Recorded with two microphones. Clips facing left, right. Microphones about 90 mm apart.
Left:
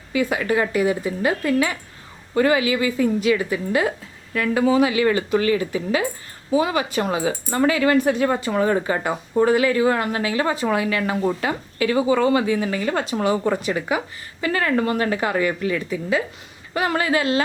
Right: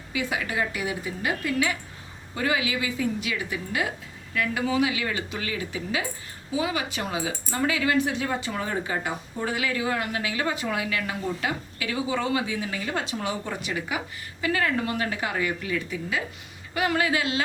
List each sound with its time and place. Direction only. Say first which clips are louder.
0.1 s speech: left 8 dB; 45° left (ahead or behind)
2.3 s speech: left 8 dB; 50° left (ahead or behind)
13.5 s speech: left 8 dB; 40° left (ahead or behind)